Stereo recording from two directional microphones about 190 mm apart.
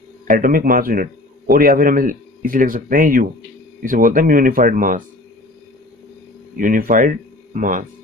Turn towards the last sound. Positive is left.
turn(degrees=-45)  # may be behind; listen again after turning